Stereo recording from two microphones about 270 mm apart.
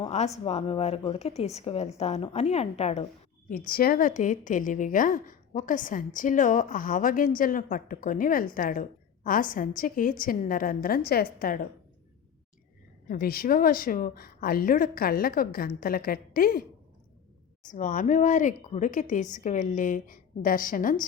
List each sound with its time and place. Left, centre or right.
0.0 s a woman's voice: left
13.1 s a woman's voice: left
17.7 s a woman's voice: left